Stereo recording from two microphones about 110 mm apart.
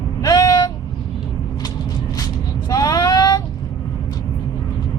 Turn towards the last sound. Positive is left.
turn(degrees=35)  # may be behind; listen again after turning